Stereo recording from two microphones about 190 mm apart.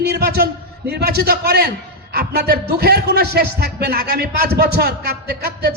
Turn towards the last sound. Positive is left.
turn(degrees=-55)  # may be behind; listen again after turning